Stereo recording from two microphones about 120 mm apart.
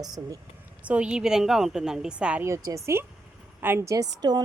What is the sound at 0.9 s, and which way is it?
A woman's voice, 10° right (ahead or behind).